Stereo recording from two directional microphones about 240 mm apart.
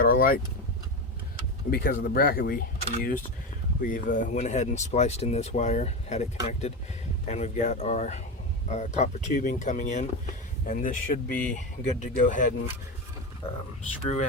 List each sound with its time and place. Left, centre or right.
0.0 s vehicle: left
1.7 s speech: left